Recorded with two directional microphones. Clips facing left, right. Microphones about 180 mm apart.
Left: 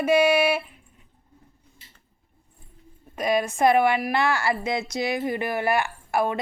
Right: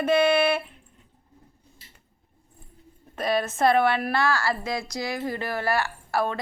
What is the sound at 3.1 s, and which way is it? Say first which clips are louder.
A woman's voice: left 2 dB; 15° left (ahead or behind).